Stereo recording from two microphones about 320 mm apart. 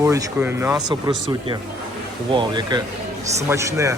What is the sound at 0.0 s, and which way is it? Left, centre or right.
A man's voice, centre.